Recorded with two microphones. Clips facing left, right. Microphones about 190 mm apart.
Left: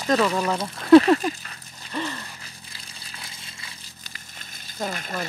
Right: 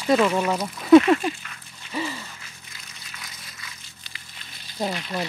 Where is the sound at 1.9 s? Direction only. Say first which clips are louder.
Even; 5° right (ahead or behind).